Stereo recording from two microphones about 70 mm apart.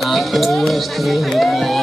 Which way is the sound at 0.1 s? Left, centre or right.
Centre.